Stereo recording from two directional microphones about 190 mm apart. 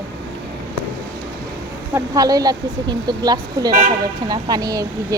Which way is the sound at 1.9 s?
20° right (ahead or behind).